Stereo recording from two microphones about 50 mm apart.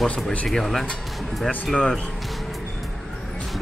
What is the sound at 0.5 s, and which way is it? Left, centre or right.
Speech, centre.